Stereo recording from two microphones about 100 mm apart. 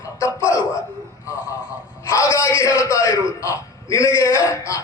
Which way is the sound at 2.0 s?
30° left (ahead or behind).